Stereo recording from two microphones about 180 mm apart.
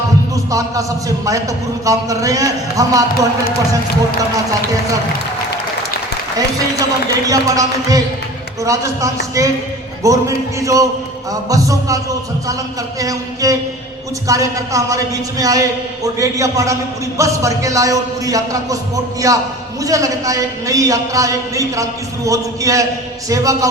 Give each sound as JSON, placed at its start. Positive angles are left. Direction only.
{"t": 0.5, "sound": "a man's voice", "side_deg": -20}
{"t": 7.3, "sound": "a man's voice", "side_deg": -20}
{"t": 13.0, "sound": "a man's voice", "side_deg": -20}